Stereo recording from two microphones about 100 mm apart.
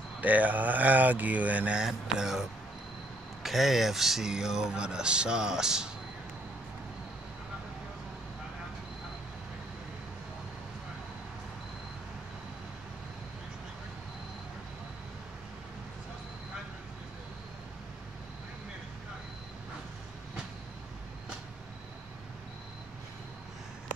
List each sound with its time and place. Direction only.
0.2 s speech: 15° right (ahead or behind)
3.4 s speech: centre (ahead or behind)